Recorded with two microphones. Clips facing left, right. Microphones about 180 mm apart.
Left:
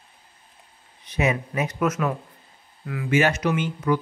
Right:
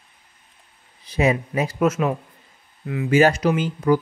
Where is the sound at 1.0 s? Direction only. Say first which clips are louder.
Right 4 dB; 30° right (ahead or behind).